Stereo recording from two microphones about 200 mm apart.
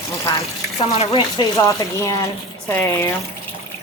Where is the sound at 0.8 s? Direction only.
30° left (ahead or behind).